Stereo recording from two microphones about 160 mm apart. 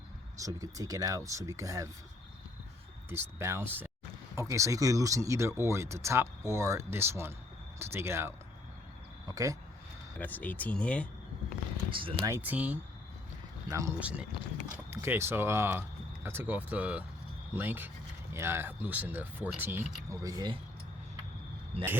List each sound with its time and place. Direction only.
0.4 s speech: 20° right (ahead or behind)
3.1 s speech: 15° right (ahead or behind)
10.2 s speech: 10° left (ahead or behind)
11.9 s speech: 30° right (ahead or behind)
12.3 s speech: 10° right (ahead or behind)
14.0 s speech: 5° right (ahead or behind); by 20.6 s 25° right (ahead or behind)